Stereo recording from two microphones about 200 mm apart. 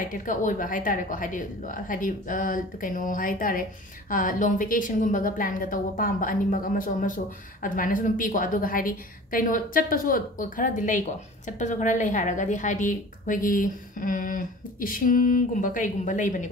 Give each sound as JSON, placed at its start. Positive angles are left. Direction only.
{"t": 0.0, "sound": "a woman's voice", "side_deg": 40}